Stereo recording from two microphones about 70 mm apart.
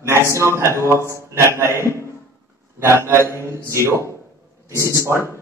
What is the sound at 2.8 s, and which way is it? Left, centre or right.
A man's voice, right.